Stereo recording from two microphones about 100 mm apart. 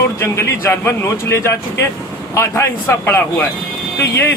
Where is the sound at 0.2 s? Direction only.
30° left (ahead or behind).